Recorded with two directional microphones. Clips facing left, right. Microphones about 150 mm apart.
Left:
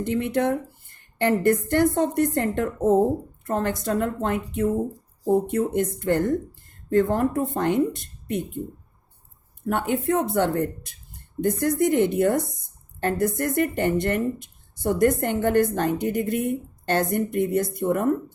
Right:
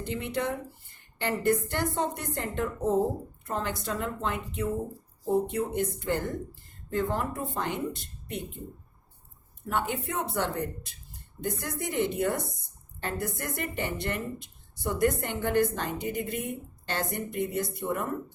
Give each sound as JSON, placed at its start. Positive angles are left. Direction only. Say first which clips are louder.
{"t": 0.0, "sound": "speech", "louder": "left 8 dB", "side_deg": 50}
{"t": 5.5, "sound": "speech", "louder": "left 6 dB", "side_deg": 50}
{"t": 9.6, "sound": "speech", "louder": "left 7 dB", "side_deg": 50}